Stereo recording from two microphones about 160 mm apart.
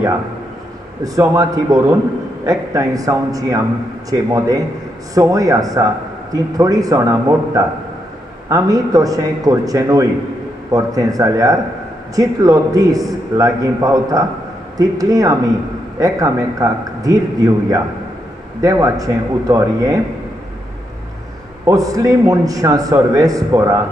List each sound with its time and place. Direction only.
1.0 s a man's voice: 20° right (ahead or behind)
21.6 s a man's voice: 20° right (ahead or behind)